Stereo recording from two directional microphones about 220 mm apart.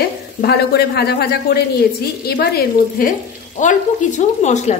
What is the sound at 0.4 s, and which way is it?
A woman's voice, 45° left (ahead or behind).